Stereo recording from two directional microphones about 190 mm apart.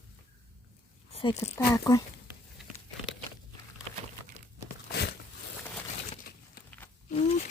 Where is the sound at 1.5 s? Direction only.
15° left (ahead or behind).